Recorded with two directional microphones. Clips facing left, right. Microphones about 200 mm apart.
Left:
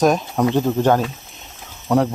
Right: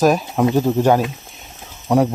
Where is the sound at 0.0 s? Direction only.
5° right (ahead or behind).